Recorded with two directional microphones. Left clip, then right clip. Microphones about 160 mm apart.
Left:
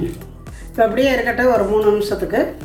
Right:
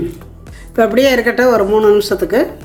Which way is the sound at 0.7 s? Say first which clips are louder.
Right 4 dB; 85° right.